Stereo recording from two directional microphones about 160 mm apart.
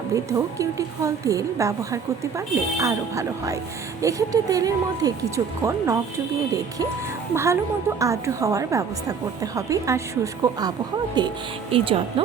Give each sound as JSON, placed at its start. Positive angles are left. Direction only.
{"t": 0.1, "sound": "a woman's voice", "side_deg": -20}
{"t": 7.3, "sound": "a woman's voice", "side_deg": -15}